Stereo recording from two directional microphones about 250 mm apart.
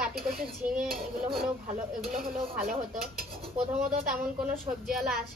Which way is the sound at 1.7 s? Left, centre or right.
Right.